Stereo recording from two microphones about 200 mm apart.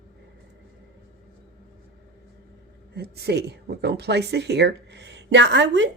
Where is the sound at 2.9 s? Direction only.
50° right (ahead or behind).